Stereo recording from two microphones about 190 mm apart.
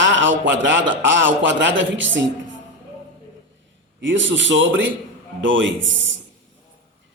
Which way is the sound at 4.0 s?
75° right (ahead or behind).